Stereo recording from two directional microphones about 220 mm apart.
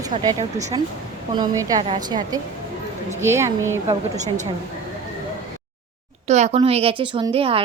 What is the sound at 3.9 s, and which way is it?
Speech, 30° right (ahead or behind).